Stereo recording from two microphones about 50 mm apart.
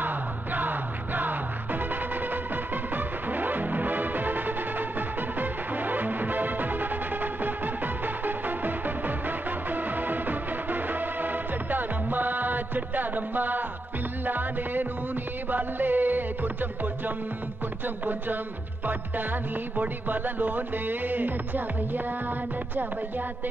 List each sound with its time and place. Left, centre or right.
0.0 s music: right
3.3 s music: right
17.8 s music: right
19.8 s music: right